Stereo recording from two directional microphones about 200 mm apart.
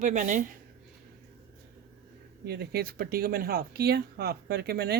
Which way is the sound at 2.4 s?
55° right (ahead or behind).